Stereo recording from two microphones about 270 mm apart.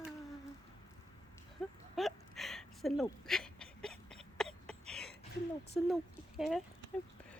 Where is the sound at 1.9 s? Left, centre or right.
Centre.